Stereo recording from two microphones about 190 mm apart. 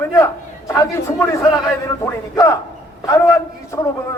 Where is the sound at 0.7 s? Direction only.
15° left (ahead or behind).